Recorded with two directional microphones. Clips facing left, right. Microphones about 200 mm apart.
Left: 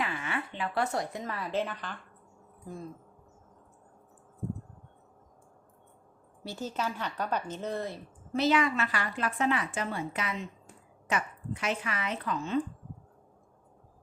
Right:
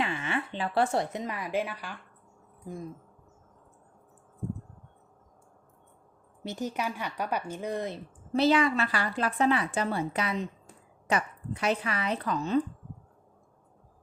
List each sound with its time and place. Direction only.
0.0 s a sound: 25° right (ahead or behind)
1.2 s speech: 15° right (ahead or behind)
6.4 s speech: 15° right (ahead or behind)
8.3 s a woman's voice: 30° right (ahead or behind)